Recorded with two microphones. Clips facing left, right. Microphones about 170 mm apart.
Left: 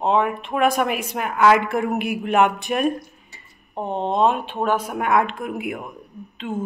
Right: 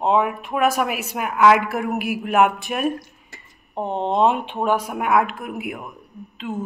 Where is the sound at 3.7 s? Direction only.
15° right (ahead or behind).